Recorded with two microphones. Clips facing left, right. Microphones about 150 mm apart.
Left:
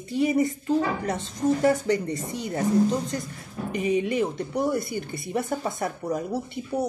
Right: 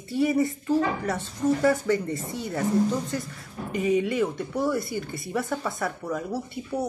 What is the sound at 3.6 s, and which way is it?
A woman's voice, 20° left (ahead or behind).